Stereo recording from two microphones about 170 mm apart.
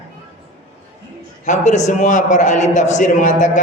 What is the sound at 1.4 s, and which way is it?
A man's voice, 45° left (ahead or behind).